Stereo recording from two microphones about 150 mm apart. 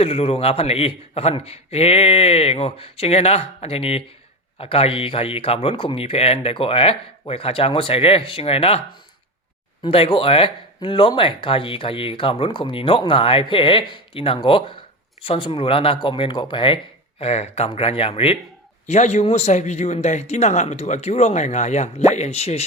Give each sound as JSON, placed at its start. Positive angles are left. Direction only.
{"t": 0.0, "sound": "speech", "side_deg": 40}
{"t": 9.8, "sound": "a man's voice", "side_deg": 35}